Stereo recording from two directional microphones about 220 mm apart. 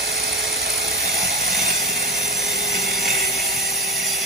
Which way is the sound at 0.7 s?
Centre (ahead or behind).